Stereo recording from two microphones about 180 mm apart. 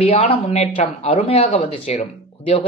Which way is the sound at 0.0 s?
30° left (ahead or behind).